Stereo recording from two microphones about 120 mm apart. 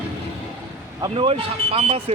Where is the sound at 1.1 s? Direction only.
55° right (ahead or behind).